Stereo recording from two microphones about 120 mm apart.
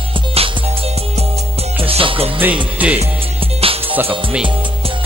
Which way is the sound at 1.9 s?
50° right (ahead or behind).